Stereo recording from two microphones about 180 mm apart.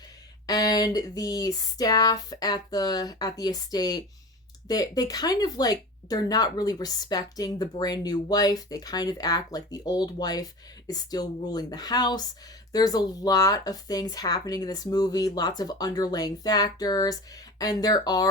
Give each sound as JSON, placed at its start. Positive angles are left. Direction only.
{"t": 0.4, "sound": "speech", "side_deg": 20}